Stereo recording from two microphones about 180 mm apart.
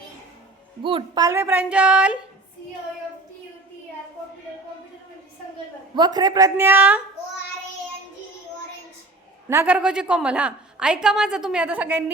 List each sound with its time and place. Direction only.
0.8 s a woman's voice: 30° right (ahead or behind); by 2.1 s 5° right (ahead or behind)
6.0 s speech: 20° right (ahead or behind)
9.5 s a woman's voice: 10° right (ahead or behind)